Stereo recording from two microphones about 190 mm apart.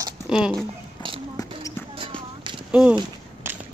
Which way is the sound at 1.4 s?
20° left (ahead or behind).